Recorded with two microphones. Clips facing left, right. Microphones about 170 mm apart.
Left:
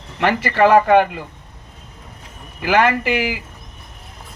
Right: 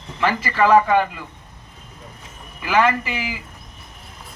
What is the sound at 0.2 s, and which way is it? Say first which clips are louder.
Speech: left 4 dB; 65° left (ahead or behind).